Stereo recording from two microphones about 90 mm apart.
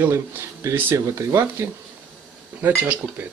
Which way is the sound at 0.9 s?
35° right (ahead or behind).